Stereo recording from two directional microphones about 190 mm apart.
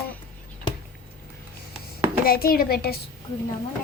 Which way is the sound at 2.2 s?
50° left (ahead or behind).